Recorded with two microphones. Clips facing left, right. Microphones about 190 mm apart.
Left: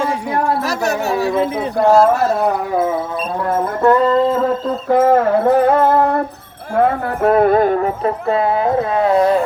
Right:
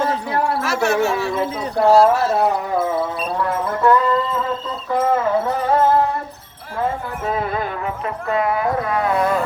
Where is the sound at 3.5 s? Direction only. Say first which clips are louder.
Left 4 dB; 45° left (ahead or behind).